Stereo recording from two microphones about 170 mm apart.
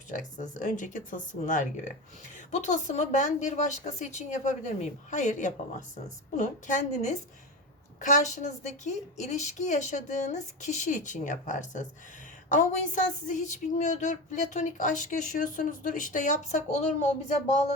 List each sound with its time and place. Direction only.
0.1 s a woman's voice: 50° left (ahead or behind)